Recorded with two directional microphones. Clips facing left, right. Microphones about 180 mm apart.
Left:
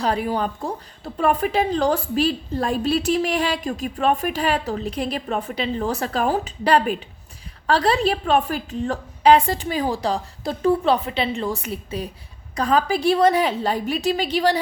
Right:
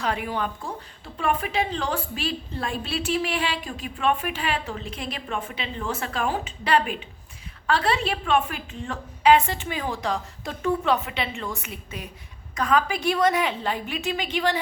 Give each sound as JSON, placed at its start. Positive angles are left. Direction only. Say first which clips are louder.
{"t": 0.0, "sound": "a woman's voice", "louder": "left 5 dB", "side_deg": 35}